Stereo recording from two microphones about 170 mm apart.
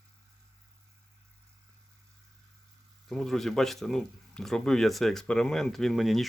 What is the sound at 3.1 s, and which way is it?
Speech, centre (ahead or behind).